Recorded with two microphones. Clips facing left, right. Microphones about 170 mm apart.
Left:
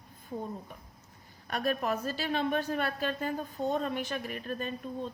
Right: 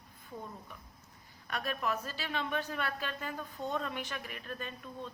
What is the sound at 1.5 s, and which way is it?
A woman's voice, 45° left (ahead or behind).